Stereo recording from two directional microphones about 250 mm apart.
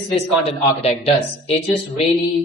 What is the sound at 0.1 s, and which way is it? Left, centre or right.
Speech, left.